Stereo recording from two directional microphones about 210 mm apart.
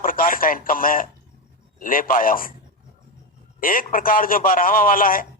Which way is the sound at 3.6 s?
40° left (ahead or behind).